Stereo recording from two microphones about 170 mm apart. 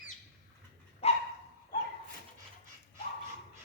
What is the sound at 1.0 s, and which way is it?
Dog, 35° left (ahead or behind).